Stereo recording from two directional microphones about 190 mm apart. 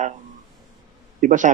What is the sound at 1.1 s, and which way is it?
Speech, 40° right (ahead or behind).